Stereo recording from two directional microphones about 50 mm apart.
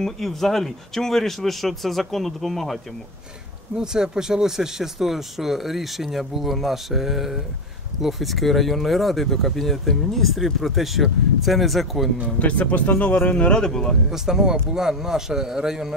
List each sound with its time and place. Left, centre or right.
0.0 s speech: centre
3.7 s speech: centre
12.4 s speech: left
13.7 s speech: centre
14.1 s a man's voice: centre